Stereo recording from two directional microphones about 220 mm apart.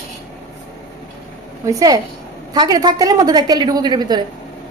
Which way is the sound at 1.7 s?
15° right (ahead or behind).